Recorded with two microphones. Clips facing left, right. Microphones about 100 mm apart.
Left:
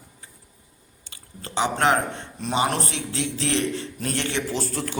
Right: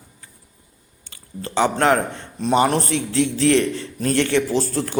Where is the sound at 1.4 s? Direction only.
40° right (ahead or behind).